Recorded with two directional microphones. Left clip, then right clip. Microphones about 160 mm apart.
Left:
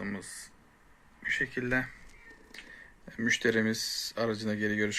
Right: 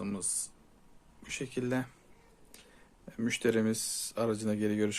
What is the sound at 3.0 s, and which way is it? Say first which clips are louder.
Speech: left 3 dB; 15° right (ahead or behind).